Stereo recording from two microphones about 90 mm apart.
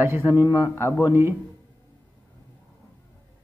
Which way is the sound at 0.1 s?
25° right (ahead or behind).